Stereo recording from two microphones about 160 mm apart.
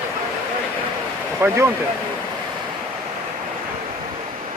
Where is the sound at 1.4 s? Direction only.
15° right (ahead or behind).